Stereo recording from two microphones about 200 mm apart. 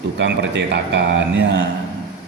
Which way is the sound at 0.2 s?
60° right (ahead or behind).